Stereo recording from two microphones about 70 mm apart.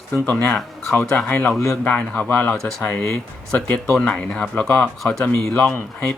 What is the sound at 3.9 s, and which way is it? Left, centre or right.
Speech, centre.